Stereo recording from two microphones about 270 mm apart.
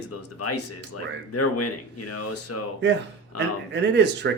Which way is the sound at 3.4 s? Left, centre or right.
Right.